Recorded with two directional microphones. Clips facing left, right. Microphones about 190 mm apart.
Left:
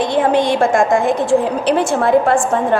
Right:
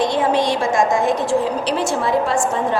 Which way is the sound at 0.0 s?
55° left (ahead or behind).